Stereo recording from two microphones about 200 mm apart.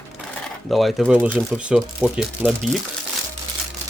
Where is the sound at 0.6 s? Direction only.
Centre (ahead or behind).